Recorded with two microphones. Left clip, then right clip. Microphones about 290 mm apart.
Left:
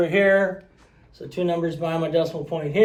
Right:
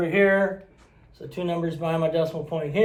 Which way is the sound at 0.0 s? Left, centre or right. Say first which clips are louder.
Left 2 dB; centre.